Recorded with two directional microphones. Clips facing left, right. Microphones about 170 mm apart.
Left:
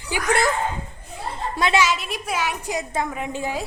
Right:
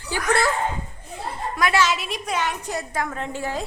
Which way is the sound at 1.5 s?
25° left (ahead or behind).